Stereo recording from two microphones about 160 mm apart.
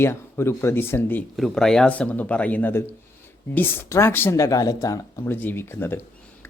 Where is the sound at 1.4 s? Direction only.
5° left (ahead or behind).